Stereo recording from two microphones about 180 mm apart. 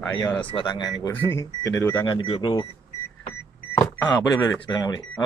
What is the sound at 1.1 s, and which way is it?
Speech, 15° left (ahead or behind).